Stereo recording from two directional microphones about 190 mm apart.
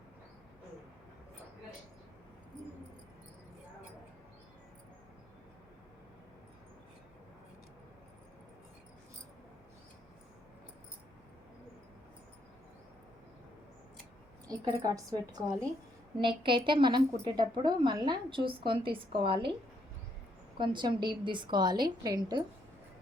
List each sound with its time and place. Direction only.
14.4 s a woman's voice: 20° right (ahead or behind)
20.6 s a woman's voice: 25° right (ahead or behind)